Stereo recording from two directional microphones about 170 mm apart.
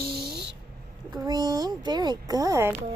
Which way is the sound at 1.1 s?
25° right (ahead or behind).